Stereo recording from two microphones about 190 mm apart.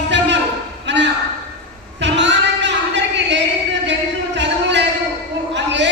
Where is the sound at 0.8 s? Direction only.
70° right (ahead or behind).